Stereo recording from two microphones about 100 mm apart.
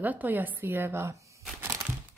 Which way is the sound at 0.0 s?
15° right (ahead or behind).